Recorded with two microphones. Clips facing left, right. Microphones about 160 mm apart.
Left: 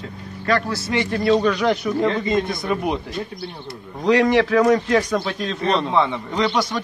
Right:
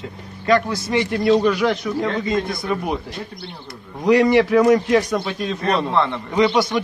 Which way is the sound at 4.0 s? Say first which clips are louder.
Right 2 dB; 10° right (ahead or behind).